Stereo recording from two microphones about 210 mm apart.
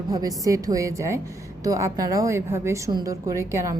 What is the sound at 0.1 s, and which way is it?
A woman's voice, 15° right (ahead or behind).